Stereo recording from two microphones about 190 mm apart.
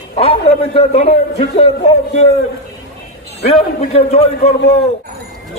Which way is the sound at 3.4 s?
35° left (ahead or behind).